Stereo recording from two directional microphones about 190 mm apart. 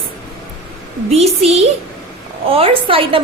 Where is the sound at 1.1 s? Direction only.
35° right (ahead or behind).